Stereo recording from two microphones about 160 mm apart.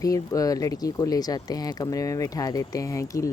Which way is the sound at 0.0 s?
20° left (ahead or behind).